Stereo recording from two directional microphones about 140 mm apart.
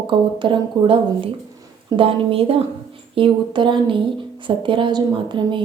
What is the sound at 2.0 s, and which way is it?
Speech, 40° right (ahead or behind).